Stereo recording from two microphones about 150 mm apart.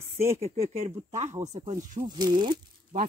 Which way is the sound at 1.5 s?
45° right (ahead or behind).